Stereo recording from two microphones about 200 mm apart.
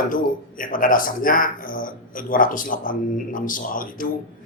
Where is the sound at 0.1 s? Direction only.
45° left (ahead or behind).